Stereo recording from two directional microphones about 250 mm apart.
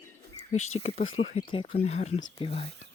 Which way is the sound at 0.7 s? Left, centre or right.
Left.